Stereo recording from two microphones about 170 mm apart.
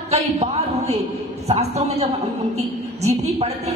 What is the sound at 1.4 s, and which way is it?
A man's voice, 40° right (ahead or behind).